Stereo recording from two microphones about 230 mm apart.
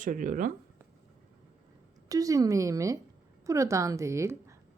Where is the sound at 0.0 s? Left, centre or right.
Right.